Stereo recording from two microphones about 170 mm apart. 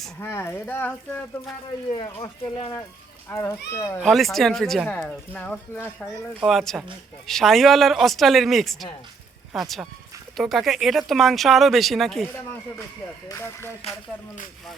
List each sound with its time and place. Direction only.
0.2 s speech: 15° left (ahead or behind)
1.9 s speech: 25° left (ahead or behind)
3.2 s speech: 15° left (ahead or behind)
4.0 s speech: centre (ahead or behind)
6.4 s speech: centre (ahead or behind)
13.2 s speech: 15° left (ahead or behind)